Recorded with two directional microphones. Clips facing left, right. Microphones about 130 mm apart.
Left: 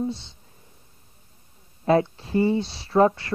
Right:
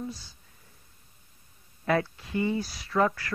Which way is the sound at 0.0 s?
25° left (ahead or behind).